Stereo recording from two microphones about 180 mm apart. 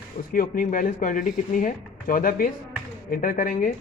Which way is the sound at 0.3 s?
50° left (ahead or behind).